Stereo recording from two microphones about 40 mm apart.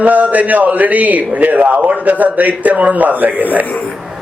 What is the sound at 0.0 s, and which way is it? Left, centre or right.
A man's voice, right.